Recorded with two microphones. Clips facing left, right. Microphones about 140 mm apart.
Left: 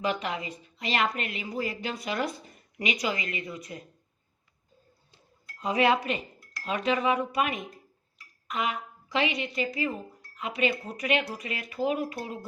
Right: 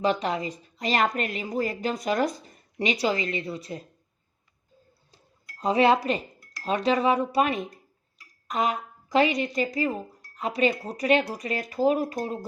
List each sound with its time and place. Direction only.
0.0 s a woman's voice: 35° right (ahead or behind)
5.1 s dishes: 35° right (ahead or behind)
6.7 s a woman's voice: 35° right (ahead or behind)